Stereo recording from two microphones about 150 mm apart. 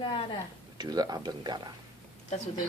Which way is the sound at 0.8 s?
25° right (ahead or behind).